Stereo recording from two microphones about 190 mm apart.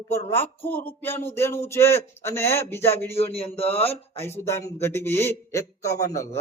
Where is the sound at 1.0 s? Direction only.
10° left (ahead or behind).